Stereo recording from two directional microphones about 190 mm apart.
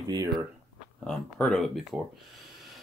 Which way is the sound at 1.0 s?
5° left (ahead or behind).